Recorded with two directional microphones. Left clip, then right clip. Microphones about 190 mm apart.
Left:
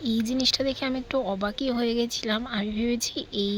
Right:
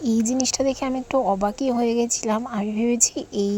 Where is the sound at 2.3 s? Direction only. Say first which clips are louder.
Right 4 dB; 10° right (ahead or behind).